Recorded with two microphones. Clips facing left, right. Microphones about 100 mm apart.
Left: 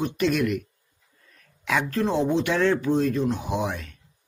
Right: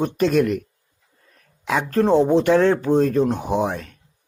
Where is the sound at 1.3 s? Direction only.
30° right (ahead or behind).